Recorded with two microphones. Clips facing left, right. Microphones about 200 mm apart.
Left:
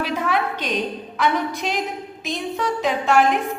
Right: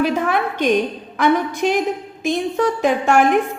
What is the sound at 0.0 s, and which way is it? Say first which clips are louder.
A woman's voice: right 4 dB; 50° right (ahead or behind).